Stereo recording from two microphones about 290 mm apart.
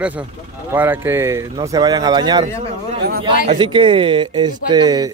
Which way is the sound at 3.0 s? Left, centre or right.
Right.